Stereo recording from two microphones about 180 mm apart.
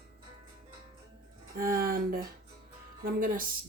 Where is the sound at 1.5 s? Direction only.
55° right (ahead or behind).